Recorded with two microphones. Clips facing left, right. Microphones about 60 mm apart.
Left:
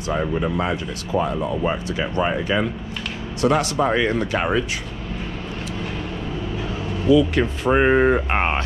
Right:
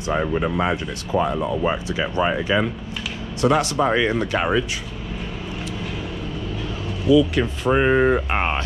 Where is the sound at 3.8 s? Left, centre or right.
Right.